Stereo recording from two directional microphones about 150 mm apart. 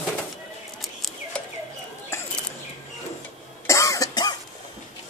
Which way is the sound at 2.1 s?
15° left (ahead or behind).